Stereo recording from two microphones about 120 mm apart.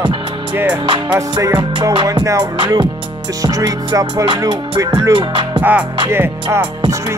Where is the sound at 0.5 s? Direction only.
15° right (ahead or behind).